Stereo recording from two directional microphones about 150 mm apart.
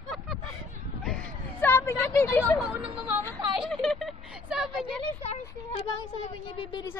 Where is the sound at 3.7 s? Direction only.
5° left (ahead or behind).